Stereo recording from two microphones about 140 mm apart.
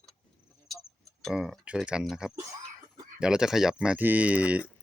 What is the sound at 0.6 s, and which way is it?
Tick-tock, centre (ahead or behind).